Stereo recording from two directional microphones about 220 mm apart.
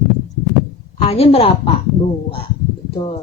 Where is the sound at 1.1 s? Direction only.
25° left (ahead or behind).